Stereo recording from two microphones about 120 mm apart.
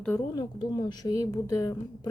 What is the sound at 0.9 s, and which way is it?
Speech, 35° left (ahead or behind).